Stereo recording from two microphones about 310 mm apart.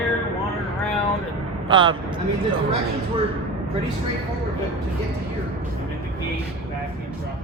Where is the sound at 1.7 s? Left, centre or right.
Centre.